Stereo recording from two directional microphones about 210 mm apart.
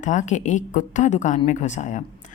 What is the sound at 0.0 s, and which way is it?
A woman's voice, 35° left (ahead or behind).